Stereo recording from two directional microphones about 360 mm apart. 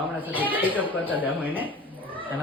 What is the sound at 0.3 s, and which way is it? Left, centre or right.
Speech, centre.